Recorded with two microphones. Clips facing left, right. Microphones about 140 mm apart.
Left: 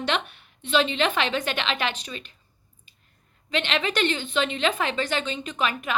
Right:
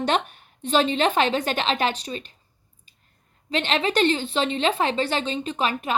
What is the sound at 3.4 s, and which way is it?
Speech, 35° right (ahead or behind).